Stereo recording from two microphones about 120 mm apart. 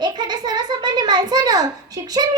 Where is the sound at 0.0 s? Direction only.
35° right (ahead or behind).